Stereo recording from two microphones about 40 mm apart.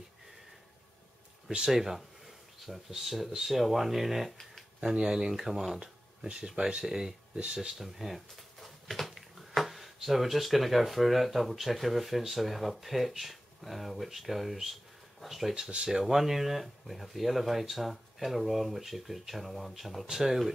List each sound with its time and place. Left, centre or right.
1.7 s speech: centre
5.8 s speech: centre